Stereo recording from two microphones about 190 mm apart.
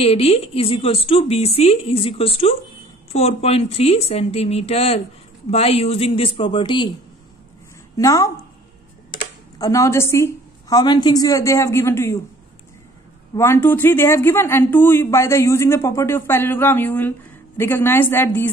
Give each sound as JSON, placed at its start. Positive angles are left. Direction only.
{"t": 0.0, "sound": "a woman's voice", "side_deg": 30}
{"t": 8.0, "sound": "speech", "side_deg": 15}
{"t": 9.6, "sound": "speech", "side_deg": 15}
{"t": 13.4, "sound": "speech", "side_deg": 10}